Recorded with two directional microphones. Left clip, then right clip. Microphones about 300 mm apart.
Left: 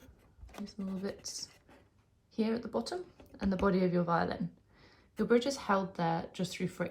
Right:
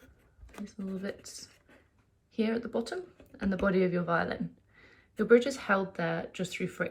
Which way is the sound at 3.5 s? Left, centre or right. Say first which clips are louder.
Right 2 dB; left.